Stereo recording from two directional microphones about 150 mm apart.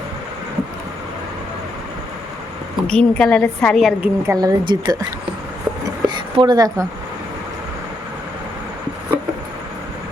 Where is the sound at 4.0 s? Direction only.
20° right (ahead or behind).